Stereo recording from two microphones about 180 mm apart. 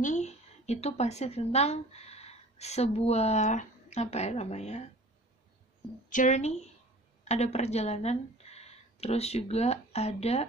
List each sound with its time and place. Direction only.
0.0 s a woman's voice: 40° left (ahead or behind)
6.0 s a woman's voice: 45° left (ahead or behind)